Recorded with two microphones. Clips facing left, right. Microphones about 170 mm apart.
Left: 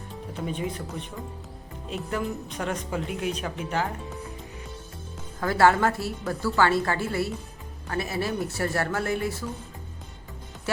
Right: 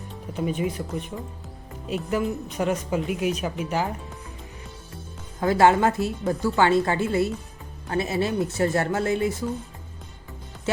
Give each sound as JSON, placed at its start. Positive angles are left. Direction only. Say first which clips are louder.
{"t": 0.4, "sound": "speech", "louder": "right 5 dB", "side_deg": -10}
{"t": 2.0, "sound": "speech", "louder": "right 4 dB", "side_deg": -10}
{"t": 5.4, "sound": "speech", "louder": "right 2 dB", "side_deg": -20}